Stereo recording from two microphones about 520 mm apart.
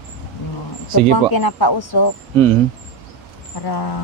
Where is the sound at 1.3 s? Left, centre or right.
Left.